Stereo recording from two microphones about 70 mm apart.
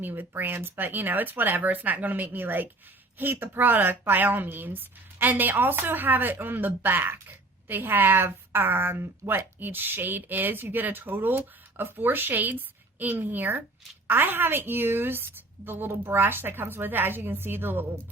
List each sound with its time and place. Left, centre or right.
0.0 s a woman's voice: right